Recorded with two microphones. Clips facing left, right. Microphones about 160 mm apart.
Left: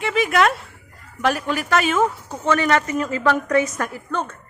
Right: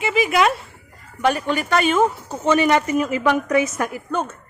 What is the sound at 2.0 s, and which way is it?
A man's voice, 20° right (ahead or behind).